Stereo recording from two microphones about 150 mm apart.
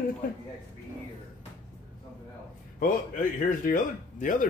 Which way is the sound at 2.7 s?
65° left (ahead or behind).